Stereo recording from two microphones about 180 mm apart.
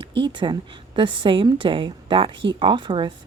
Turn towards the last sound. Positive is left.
turn(degrees=-25)  # may be behind; listen again after turning